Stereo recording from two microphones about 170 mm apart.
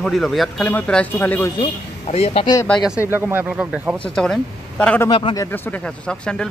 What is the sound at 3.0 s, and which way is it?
Speech, 10° right (ahead or behind).